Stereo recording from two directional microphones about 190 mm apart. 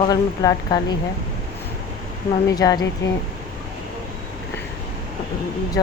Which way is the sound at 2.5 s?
20° left (ahead or behind).